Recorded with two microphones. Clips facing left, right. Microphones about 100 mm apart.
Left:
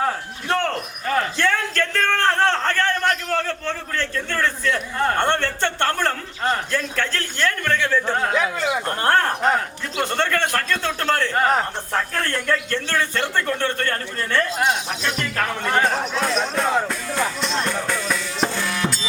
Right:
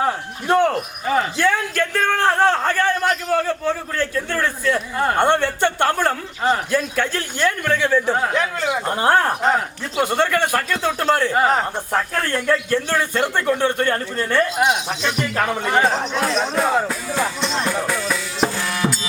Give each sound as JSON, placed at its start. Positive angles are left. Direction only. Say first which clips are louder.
{"t": 0.0, "sound": "speech", "louder": "right 2 dB", "side_deg": -10}
{"t": 8.9, "sound": "a man's voice", "louder": "right 3 dB", "side_deg": -10}